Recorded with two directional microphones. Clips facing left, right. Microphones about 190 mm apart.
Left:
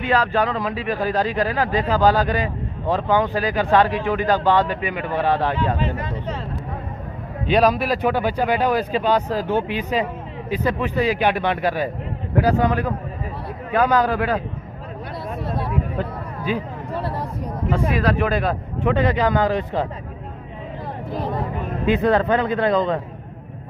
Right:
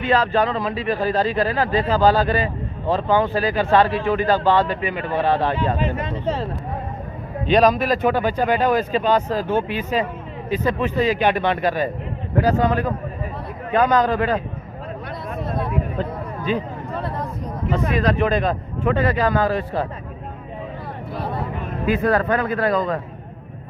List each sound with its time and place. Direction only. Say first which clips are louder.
0.0 s speech: right 1 dB; 15° left (ahead or behind)
5.8 s speech: right 1 dB; 20° right (ahead or behind)
7.4 s speech: right 1 dB; 10° left (ahead or behind)
16.4 s a sound: right 1 dB; 10° left (ahead or behind)
17.6 s speech: even; 10° left (ahead or behind)
18.9 s speech: left 1 dB; 20° left (ahead or behind)
21.8 s speech: left 1 dB; 20° left (ahead or behind)